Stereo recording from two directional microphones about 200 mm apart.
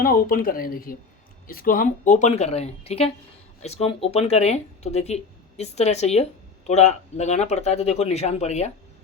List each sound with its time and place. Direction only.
0.0 s speech: 45° left (ahead or behind)